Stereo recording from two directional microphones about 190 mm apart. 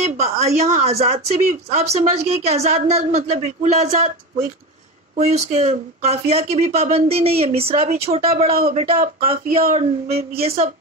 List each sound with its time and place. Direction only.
0.0 s a sound: 35° right (ahead or behind)
0.6 s speech: 35° right (ahead or behind)
5.1 s speech: 35° right (ahead or behind)
8.9 s speech: 50° right (ahead or behind)
9.6 s speech: 30° right (ahead or behind)